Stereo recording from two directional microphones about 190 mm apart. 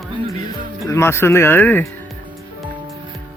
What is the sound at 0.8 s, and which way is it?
Speech, 15° left (ahead or behind).